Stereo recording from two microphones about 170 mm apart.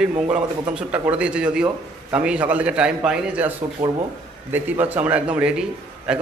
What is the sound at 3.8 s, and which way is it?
Speech, 50° right (ahead or behind).